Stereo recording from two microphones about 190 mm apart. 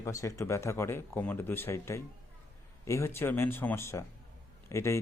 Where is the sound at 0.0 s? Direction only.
15° left (ahead or behind).